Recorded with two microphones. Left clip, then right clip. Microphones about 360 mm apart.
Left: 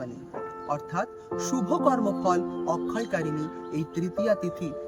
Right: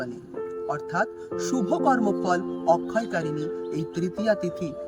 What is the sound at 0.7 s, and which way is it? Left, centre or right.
Music, centre.